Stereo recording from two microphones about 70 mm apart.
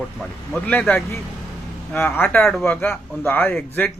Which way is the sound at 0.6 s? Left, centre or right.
Centre.